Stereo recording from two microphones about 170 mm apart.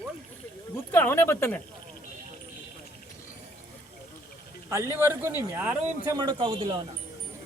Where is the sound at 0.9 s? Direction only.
15° left (ahead or behind).